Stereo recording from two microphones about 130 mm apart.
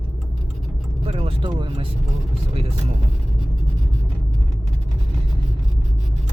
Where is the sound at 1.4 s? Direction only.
35° right (ahead or behind).